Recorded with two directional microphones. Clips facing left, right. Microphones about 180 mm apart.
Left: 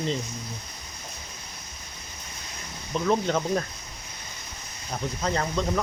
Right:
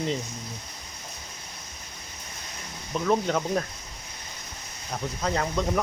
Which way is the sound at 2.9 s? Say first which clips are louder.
Even; 5° right (ahead or behind).